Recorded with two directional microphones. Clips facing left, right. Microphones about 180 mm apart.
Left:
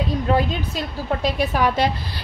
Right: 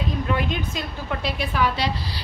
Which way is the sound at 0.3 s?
40° left (ahead or behind).